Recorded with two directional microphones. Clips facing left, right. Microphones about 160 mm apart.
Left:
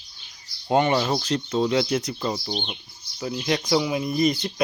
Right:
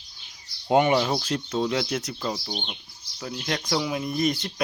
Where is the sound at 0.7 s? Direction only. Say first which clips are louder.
Even; 10° right (ahead or behind).